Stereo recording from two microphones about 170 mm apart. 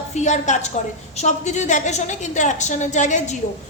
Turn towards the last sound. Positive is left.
turn(degrees=45)  # may be behind; listen again after turning